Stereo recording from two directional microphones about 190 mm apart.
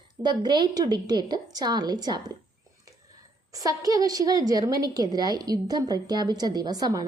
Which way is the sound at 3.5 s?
20° right (ahead or behind).